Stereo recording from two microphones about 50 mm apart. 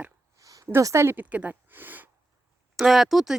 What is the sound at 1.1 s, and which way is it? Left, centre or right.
Speech, right.